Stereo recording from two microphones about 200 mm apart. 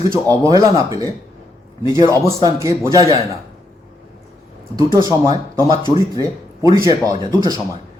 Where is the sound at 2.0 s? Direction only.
15° right (ahead or behind).